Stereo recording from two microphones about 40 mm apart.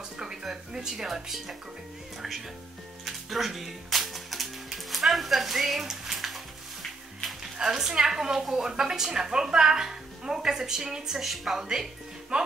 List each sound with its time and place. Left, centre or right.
0.2 s speech: centre
3.1 s music: centre
7.5 s a woman's voice: centre
12.3 s speech: right